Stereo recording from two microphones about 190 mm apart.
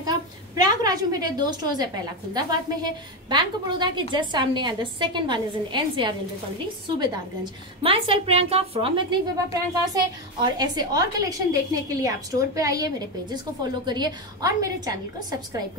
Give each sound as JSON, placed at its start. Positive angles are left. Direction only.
{"t": 0.0, "sound": "a woman's voice", "side_deg": -20}
{"t": 7.8, "sound": "a woman's voice", "side_deg": -30}